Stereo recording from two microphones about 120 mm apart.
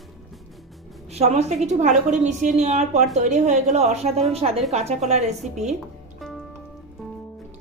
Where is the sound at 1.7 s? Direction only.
80° right.